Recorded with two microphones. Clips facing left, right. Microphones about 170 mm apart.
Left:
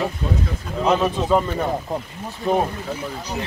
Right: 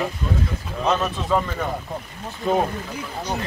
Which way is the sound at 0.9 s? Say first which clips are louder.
Left 3 dB; 10° left (ahead or behind).